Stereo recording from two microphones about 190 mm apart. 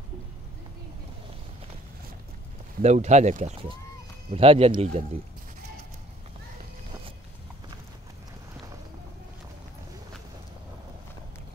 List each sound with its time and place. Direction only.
2.8 s speech: 35° right (ahead or behind)